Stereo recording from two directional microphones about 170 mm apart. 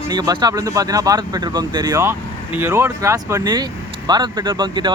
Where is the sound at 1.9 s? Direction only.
15° right (ahead or behind).